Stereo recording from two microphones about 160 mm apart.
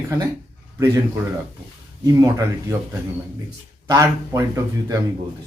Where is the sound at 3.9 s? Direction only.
20° right (ahead or behind).